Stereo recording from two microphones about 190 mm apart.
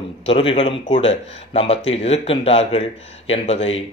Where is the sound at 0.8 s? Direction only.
40° left (ahead or behind).